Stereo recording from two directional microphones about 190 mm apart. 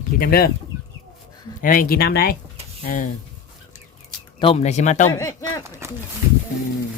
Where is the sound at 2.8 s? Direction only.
45° left (ahead or behind).